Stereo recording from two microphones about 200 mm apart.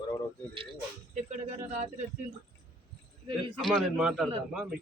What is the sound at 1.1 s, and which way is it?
Speech, 35° right (ahead or behind).